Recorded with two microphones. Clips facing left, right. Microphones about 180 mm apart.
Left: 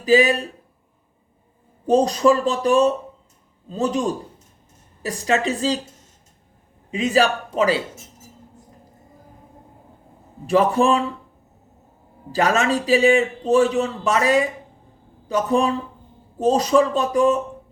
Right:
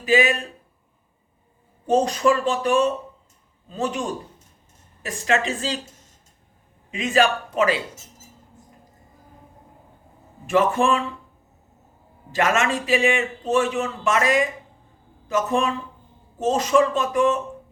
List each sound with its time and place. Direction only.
0.0 s speech: 35° left (ahead or behind)
1.9 s speech: 35° left (ahead or behind)
5.0 s speech: 35° left (ahead or behind)
6.9 s speech: 35° left (ahead or behind)
10.4 s speech: 35° left (ahead or behind)
12.3 s speech: 35° left (ahead or behind)